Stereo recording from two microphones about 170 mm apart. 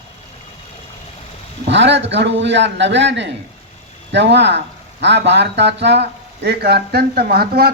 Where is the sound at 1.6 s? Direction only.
90° right.